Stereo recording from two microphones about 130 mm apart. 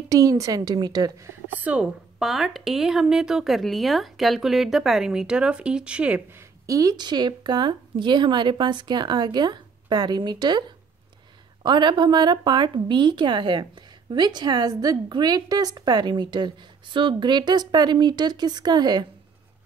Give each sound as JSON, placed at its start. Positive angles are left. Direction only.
{"t": 0.1, "sound": "a woman's voice", "side_deg": -25}
{"t": 1.5, "sound": "a woman's voice", "side_deg": -10}
{"t": 6.6, "sound": "a woman's voice", "side_deg": -25}
{"t": 11.6, "sound": "a woman's voice", "side_deg": -35}